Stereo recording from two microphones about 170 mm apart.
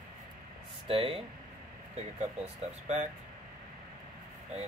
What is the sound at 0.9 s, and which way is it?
Speech, 35° right (ahead or behind).